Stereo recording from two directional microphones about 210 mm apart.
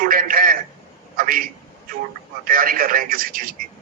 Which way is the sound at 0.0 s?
40° right (ahead or behind).